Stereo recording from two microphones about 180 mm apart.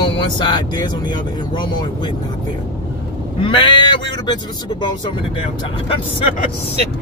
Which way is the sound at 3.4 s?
25° left (ahead or behind).